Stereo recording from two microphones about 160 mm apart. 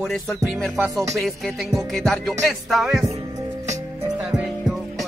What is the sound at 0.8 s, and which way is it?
Music, 20° right (ahead or behind).